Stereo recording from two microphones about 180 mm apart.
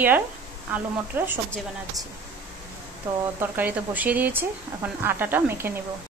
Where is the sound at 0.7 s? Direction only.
10° right (ahead or behind).